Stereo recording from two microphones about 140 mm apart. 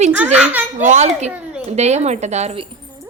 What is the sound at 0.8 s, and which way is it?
A woman's voice, 55° right (ahead or behind).